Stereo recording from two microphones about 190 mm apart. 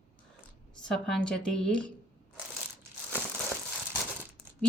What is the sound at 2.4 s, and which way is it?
Crushing, 10° right (ahead or behind).